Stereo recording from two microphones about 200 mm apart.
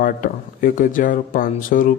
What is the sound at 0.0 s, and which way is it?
Speech, 40° left (ahead or behind).